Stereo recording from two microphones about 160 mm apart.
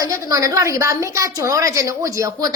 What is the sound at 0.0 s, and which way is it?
A woman's voice, 20° right (ahead or behind).